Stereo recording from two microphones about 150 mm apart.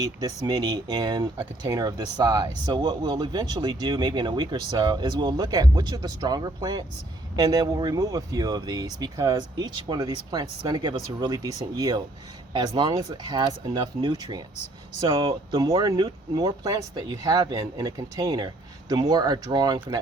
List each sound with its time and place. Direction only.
0.2 s speech: 25° right (ahead or behind)